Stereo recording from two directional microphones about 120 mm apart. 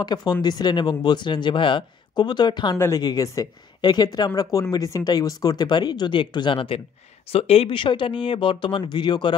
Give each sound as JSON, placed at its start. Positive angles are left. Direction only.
{"t": 0.0, "sound": "speech", "side_deg": 35}